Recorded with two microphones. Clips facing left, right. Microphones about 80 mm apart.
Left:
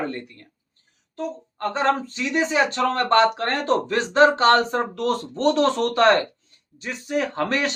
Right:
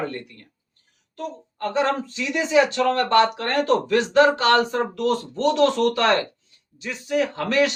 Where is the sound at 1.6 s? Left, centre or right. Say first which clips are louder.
Even; left.